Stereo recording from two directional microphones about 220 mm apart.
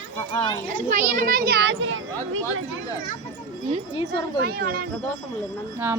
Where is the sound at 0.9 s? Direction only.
35° right (ahead or behind); by 2.6 s 65° right (ahead or behind).